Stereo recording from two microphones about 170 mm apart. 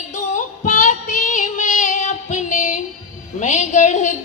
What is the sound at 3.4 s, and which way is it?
Speech, 45° left (ahead or behind).